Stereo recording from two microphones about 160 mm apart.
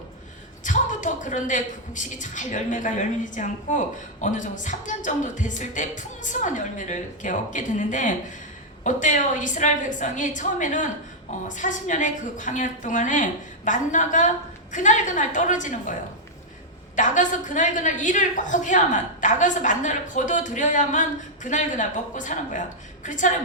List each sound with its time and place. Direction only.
0.6 s a woman's voice: 50° left (ahead or behind)